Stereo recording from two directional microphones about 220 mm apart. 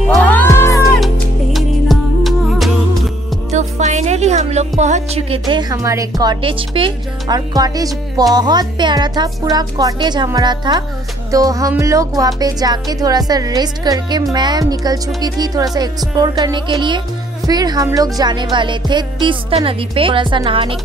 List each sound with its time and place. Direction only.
0.1 s music: 10° left (ahead or behind)
0.9 s music: centre (ahead or behind)
3.5 s music: 30° right (ahead or behind)
5.5 s speech: 20° right (ahead or behind)